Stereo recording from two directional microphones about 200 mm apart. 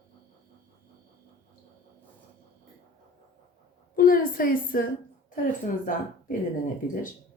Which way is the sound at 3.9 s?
45° left (ahead or behind).